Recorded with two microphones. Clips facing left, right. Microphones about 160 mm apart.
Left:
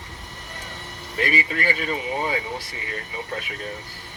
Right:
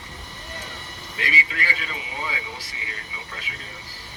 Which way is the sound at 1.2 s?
50° left (ahead or behind).